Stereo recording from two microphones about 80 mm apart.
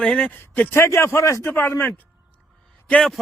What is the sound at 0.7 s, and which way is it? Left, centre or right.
Speech, left.